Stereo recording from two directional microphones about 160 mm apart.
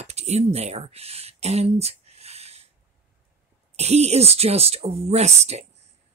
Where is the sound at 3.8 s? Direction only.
45° right (ahead or behind).